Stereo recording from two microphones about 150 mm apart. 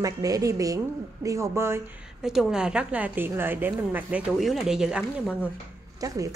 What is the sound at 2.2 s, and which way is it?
A woman's voice, 5° right (ahead or behind).